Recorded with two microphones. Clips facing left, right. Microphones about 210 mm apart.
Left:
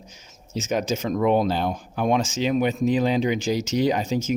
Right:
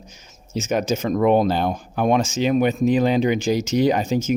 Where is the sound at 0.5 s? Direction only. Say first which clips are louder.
Right 3 dB; 55° right (ahead or behind).